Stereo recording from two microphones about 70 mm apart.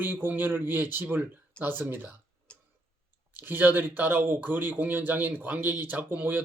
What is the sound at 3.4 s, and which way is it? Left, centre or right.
Speech, right.